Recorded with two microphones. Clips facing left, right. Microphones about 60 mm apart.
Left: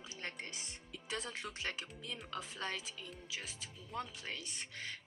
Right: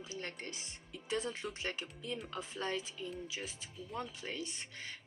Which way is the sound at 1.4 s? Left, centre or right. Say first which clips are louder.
Right 4 dB; centre.